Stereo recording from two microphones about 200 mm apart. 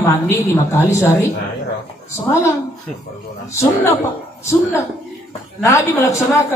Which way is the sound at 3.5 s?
15° left (ahead or behind).